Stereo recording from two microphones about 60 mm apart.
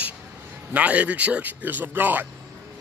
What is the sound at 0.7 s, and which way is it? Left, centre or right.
A man's voice, right.